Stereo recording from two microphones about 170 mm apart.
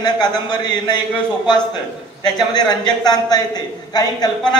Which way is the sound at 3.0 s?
25° left (ahead or behind).